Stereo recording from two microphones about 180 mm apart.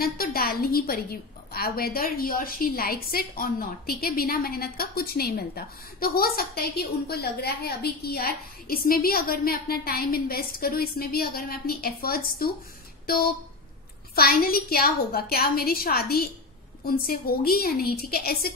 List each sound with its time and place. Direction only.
0.0 s a woman's voice: 55° left (ahead or behind)